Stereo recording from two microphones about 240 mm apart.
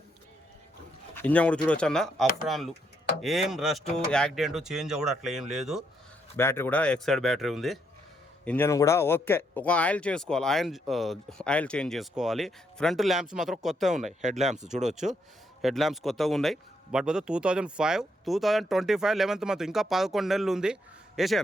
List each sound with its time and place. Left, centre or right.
1.1 s speech: centre
6.3 s speech: centre
14.2 s speech: right
15.6 s speech: centre